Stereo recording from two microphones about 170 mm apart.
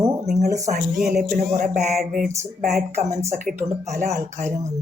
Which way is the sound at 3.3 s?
55° right (ahead or behind).